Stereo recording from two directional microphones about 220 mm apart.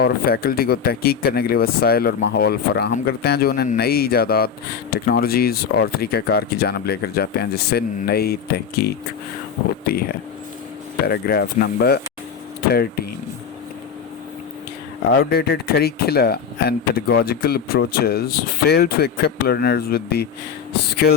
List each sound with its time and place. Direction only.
0.0 s speech: 45° left (ahead or behind)
15.2 s speech: 45° left (ahead or behind)